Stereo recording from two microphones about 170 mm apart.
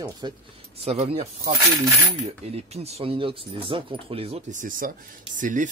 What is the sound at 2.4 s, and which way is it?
Speech, 35° right (ahead or behind).